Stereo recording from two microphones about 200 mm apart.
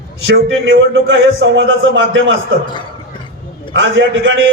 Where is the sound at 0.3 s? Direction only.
70° right (ahead or behind).